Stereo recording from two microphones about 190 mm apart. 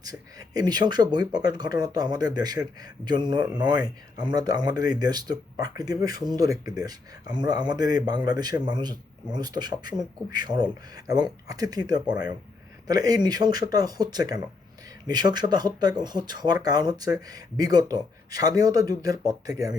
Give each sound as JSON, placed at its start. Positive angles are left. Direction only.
{"t": 0.0, "sound": "speech", "side_deg": -20}